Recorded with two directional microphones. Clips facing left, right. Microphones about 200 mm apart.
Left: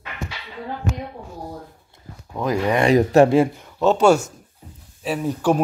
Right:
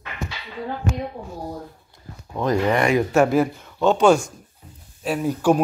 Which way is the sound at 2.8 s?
35° left (ahead or behind).